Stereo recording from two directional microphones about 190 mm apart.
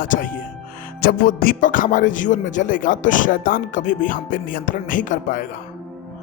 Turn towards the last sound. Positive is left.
turn(degrees=40)  # may be behind; listen again after turning